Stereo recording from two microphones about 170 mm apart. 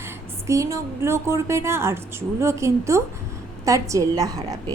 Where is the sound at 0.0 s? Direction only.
15° right (ahead or behind).